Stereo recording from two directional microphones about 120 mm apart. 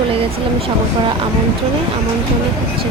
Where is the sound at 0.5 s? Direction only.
50° right (ahead or behind).